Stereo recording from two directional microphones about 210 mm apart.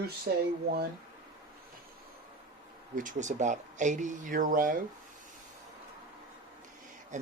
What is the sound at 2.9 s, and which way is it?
Speech, 40° right (ahead or behind).